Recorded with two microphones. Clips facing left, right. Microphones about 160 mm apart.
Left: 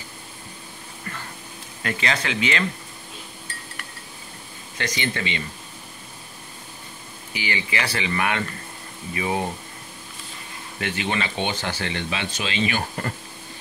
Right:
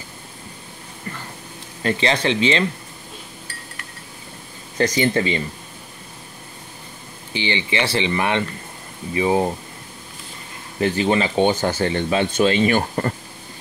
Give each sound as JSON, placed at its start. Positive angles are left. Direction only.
{"t": 1.8, "sound": "speech", "side_deg": -30}
{"t": 4.7, "sound": "speech", "side_deg": -40}
{"t": 7.3, "sound": "speech", "side_deg": -25}
{"t": 10.8, "sound": "speech", "side_deg": -35}